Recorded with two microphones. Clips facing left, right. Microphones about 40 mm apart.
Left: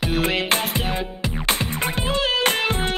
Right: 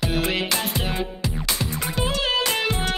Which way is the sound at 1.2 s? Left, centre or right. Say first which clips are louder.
Left 3 dB; left.